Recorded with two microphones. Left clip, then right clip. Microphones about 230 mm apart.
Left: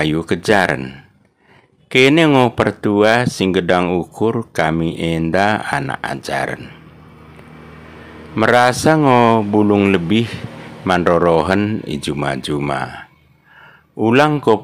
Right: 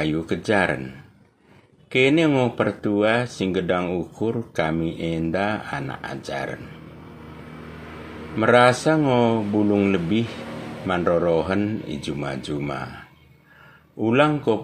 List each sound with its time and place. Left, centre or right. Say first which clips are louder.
0.0 s speech: left 7 dB; left
8.4 s speech: left 3 dB; left